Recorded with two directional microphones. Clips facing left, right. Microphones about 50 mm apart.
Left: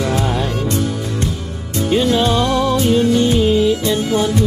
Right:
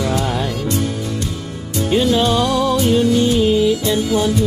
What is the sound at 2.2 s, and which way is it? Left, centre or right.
Music, centre.